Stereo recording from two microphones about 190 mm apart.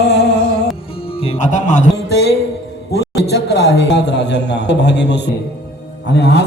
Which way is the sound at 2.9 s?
60° left (ahead or behind).